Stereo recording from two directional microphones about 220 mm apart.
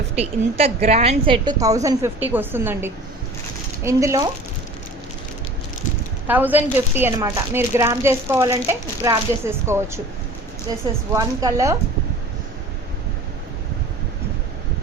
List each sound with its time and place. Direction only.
0.2 s speech: 30° right (ahead or behind)
6.2 s speech: 10° right (ahead or behind)
11.1 s speech: 15° right (ahead or behind)